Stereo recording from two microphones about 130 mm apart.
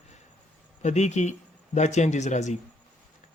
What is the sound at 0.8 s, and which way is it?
Speech, 60° left (ahead or behind).